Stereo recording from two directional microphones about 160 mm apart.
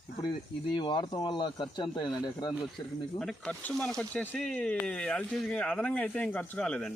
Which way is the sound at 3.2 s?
5° left (ahead or behind).